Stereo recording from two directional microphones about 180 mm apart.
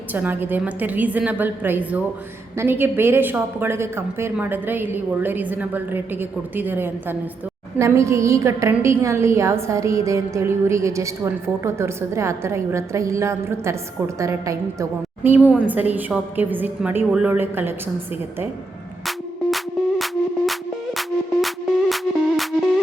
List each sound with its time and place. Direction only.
0.1 s a woman's voice: 10° right (ahead or behind)
19.0 s music: centre (ahead or behind)
21.4 s music: centre (ahead or behind)